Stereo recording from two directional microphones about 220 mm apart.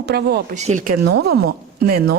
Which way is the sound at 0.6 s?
35° right (ahead or behind).